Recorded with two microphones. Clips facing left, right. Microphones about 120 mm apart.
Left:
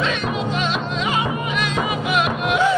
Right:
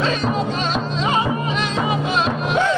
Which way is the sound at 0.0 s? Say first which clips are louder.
Right 2 dB; 35° right (ahead or behind).